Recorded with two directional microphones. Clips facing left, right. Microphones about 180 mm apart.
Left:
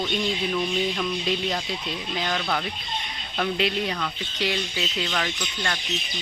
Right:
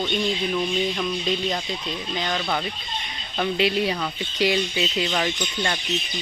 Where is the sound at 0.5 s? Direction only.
5° right (ahead or behind).